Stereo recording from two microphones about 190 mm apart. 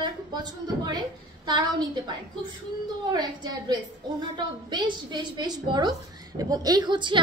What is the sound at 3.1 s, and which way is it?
A woman's voice, 20° right (ahead or behind).